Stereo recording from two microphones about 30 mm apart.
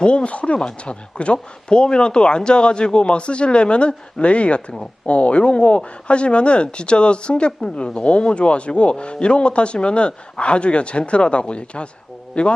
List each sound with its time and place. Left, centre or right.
0.0 s speech: left